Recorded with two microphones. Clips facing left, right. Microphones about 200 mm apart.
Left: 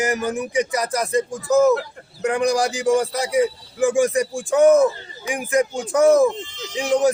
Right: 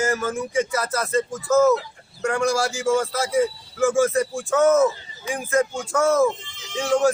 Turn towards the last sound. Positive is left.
turn(degrees=20)  # may be behind; listen again after turning